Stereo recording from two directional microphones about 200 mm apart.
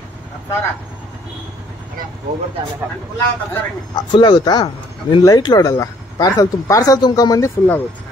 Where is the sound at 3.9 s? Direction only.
25° left (ahead or behind).